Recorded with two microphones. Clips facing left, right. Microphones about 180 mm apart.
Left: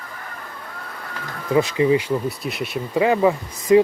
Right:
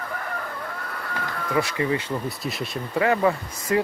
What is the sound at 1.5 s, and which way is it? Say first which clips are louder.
Speech: left 7 dB; 20° left (ahead or behind).